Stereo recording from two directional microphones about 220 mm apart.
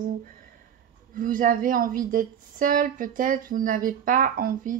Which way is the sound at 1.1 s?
40° right (ahead or behind).